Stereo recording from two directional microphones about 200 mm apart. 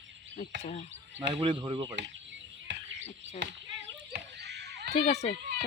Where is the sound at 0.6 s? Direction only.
35° left (ahead or behind).